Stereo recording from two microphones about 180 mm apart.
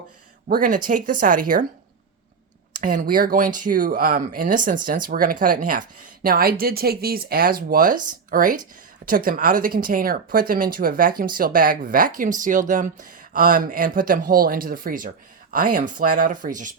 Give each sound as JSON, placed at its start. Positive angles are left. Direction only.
{"t": 0.4, "sound": "speech", "side_deg": -50}
{"t": 2.8, "sound": "speech", "side_deg": -50}